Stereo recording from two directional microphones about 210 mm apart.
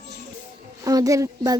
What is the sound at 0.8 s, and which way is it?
Speech, 15° right (ahead or behind).